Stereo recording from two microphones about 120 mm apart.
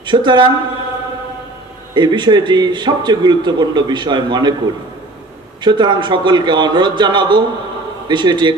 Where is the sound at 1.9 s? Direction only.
40° right (ahead or behind).